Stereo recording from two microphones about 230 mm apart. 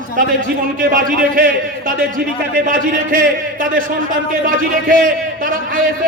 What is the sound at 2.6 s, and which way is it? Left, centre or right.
Speech, right.